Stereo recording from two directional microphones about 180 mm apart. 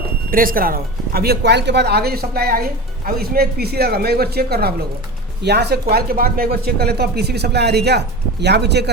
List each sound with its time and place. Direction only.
0.3 s speech: 50° right (ahead or behind); by 8.9 s 70° right (ahead or behind)